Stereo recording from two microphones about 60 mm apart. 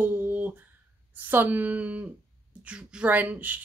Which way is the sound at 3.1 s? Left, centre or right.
Right.